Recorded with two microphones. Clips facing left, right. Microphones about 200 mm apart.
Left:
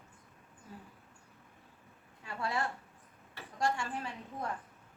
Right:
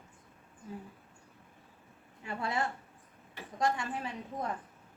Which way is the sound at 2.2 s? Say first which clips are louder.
Right 1 dB; 20° right (ahead or behind).